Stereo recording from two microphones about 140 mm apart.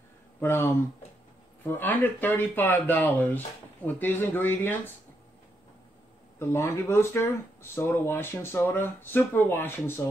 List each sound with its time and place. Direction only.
0.4 s speech: 15° left (ahead or behind)
6.4 s speech: 15° left (ahead or behind)